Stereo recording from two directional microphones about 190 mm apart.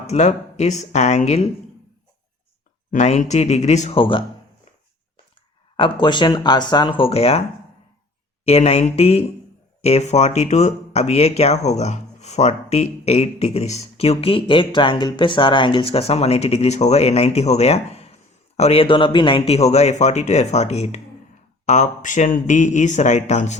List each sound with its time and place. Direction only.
0.1 s speech: 35° left (ahead or behind)
2.9 s speech: 40° left (ahead or behind)
5.7 s speech: 25° left (ahead or behind)
8.4 s speech: 35° left (ahead or behind)